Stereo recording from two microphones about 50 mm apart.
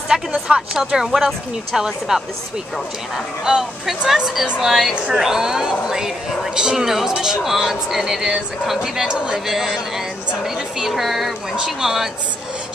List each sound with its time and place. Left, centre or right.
0.1 s speech: centre
3.4 s speech: centre